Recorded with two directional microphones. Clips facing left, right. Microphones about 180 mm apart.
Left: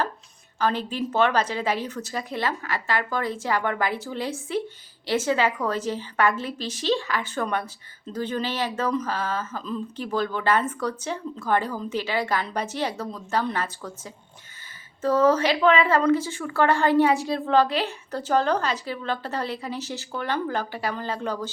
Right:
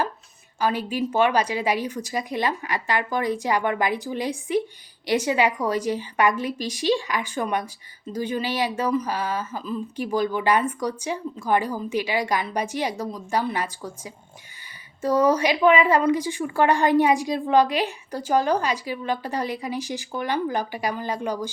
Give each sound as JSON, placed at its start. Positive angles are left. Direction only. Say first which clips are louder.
{"t": 0.6, "sound": "a woman's voice", "louder": "right 1 dB", "side_deg": -10}